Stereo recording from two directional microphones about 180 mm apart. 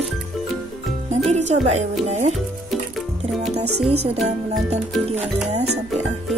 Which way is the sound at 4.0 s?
40° right (ahead or behind).